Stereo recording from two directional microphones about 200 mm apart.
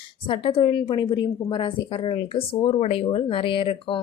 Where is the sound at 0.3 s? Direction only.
25° left (ahead or behind).